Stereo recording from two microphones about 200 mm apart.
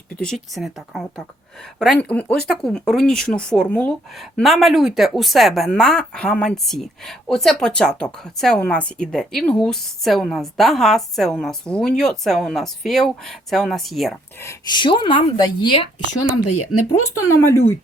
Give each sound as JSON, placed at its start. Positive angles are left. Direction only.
{"t": 0.5, "sound": "speech", "side_deg": 0}
{"t": 14.3, "sound": "speech", "side_deg": 15}
{"t": 16.7, "sound": "speech", "side_deg": 90}
{"t": 17.2, "sound": "speech", "side_deg": 15}